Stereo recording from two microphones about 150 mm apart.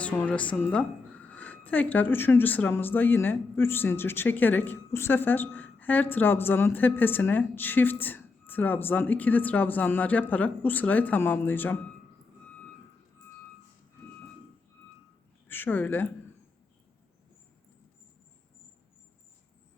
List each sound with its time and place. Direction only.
0.0 s speech: 10° left (ahead or behind)
15.4 s speech: 15° left (ahead or behind)